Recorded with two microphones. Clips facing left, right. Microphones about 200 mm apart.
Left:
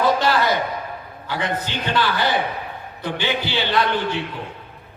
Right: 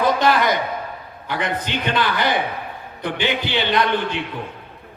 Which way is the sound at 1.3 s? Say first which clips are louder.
Right 1 dB; 20° right (ahead or behind).